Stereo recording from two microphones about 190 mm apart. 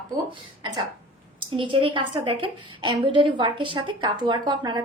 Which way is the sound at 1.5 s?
25° right (ahead or behind).